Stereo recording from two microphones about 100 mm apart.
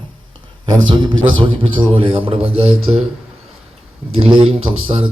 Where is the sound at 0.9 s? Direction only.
45° right (ahead or behind).